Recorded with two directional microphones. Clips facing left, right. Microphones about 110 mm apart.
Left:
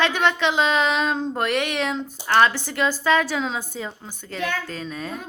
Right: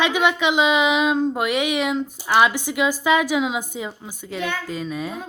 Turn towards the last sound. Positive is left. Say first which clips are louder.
# right 3 dB
turn(degrees=-10)  # may be behind; listen again after turning